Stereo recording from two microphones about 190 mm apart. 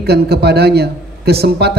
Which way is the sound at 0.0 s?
60° right (ahead or behind).